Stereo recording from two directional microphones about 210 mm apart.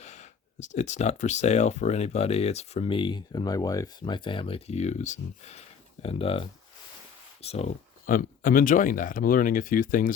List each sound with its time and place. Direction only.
0.0 s speech: 35° left (ahead or behind)
7.4 s speech: 30° left (ahead or behind)